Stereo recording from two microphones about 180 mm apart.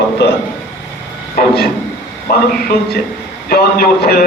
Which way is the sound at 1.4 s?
60° left (ahead or behind).